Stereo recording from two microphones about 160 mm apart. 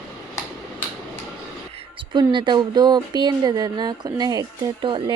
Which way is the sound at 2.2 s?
30° right (ahead or behind).